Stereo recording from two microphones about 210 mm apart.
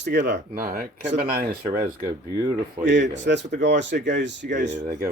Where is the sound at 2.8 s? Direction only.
60° right (ahead or behind).